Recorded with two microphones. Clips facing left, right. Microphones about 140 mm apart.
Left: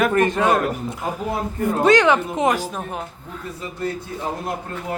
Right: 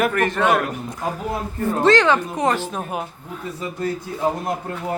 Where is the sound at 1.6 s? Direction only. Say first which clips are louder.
Left 1 dB; 20° left (ahead or behind).